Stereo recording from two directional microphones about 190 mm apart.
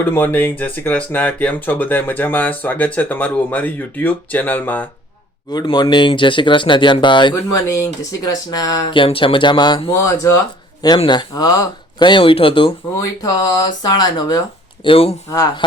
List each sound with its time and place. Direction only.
0.0 s speech: 10° left (ahead or behind)
5.5 s speech: 20° left (ahead or behind)